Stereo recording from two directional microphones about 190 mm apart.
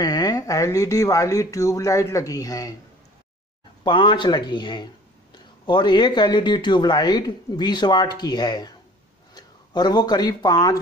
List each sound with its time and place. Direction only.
0.0 s speech: 20° left (ahead or behind)
3.8 s speech: 25° left (ahead or behind)